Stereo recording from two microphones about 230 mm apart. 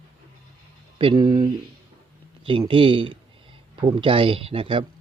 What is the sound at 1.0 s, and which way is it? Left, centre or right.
Speech, right.